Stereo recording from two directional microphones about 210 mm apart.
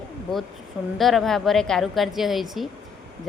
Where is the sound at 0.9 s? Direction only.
Centre (ahead or behind).